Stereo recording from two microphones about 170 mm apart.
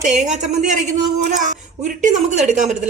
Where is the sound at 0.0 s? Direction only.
45° right (ahead or behind).